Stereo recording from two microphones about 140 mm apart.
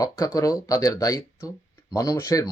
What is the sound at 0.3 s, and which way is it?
Speech, 25° left (ahead or behind).